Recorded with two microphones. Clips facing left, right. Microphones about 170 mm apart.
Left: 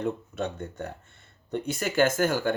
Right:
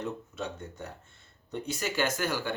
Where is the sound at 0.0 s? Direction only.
60° left (ahead or behind).